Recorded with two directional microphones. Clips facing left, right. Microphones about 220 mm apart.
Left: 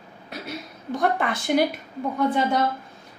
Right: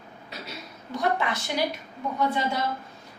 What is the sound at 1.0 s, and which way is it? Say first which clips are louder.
Speech: left 2 dB; 55° left (ahead or behind).